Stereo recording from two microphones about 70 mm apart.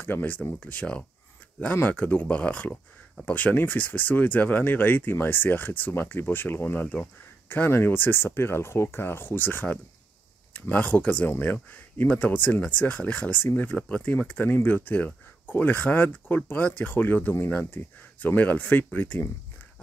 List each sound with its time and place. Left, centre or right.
0.0 s speech: left